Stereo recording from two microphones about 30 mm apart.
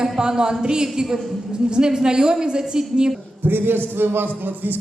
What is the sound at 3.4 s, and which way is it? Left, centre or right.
A man's voice, right.